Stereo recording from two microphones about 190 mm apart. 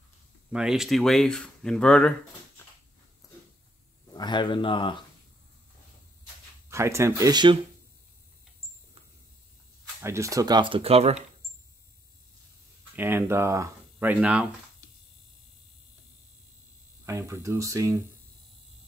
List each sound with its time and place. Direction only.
0.5 s speech: 5° right (ahead or behind)
4.1 s speech: 25° left (ahead or behind)
6.7 s speech: 15° right (ahead or behind)
10.0 s speech: 15° right (ahead or behind); by 11.1 s 30° right (ahead or behind)
12.9 s speech: 10° right (ahead or behind)
17.0 s speech: 15° right (ahead or behind)